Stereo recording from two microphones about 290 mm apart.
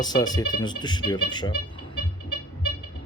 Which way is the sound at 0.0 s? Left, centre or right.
Centre.